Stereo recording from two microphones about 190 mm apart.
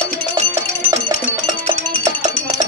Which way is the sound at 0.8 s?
25° right (ahead or behind).